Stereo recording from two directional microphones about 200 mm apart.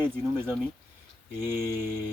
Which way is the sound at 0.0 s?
10° right (ahead or behind).